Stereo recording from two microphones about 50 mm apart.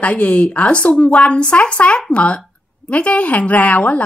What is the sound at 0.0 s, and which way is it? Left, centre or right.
Speech, left.